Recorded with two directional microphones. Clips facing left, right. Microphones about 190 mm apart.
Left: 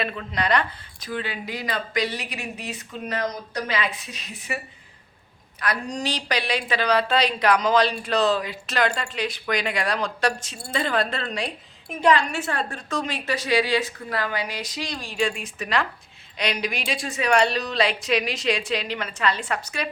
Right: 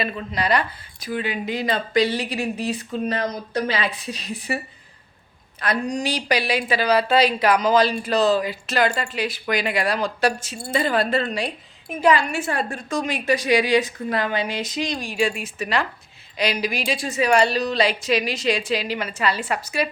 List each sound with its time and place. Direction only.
0.0 s a woman's voice: 5° right (ahead or behind); by 5.8 s 25° right (ahead or behind)
5.9 s a woman's voice: 10° right (ahead or behind)